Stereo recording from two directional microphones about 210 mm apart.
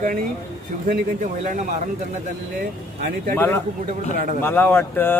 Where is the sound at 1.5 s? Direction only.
35° right (ahead or behind).